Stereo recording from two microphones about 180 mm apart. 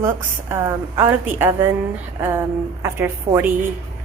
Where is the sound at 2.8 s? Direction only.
15° right (ahead or behind).